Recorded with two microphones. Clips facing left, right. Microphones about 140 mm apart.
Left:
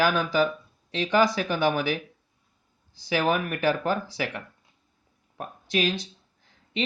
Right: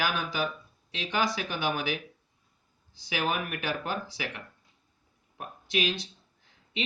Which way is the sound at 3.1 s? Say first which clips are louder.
Left 6 dB; 40° left (ahead or behind).